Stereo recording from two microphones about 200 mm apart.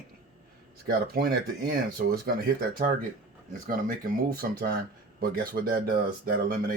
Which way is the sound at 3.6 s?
45° right (ahead or behind).